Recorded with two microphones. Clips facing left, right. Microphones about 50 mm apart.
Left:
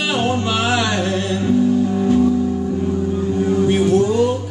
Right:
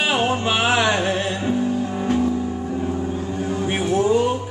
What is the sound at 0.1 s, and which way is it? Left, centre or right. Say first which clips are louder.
Music: left 1 dB; centre.